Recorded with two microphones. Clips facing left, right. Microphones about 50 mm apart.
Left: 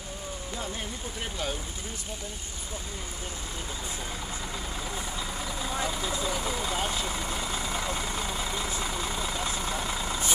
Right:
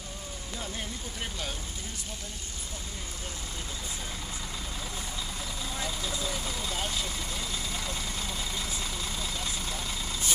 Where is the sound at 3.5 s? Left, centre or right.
Centre.